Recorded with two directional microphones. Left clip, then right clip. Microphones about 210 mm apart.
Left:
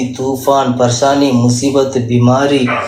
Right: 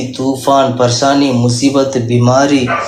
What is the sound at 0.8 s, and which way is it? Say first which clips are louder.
Speech: even; 25° right (ahead or behind).